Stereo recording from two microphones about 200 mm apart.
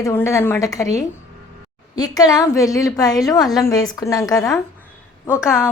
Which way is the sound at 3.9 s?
15° left (ahead or behind).